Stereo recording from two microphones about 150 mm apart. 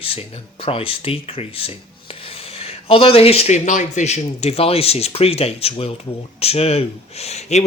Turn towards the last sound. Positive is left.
turn(degrees=45)  # may be behind; listen again after turning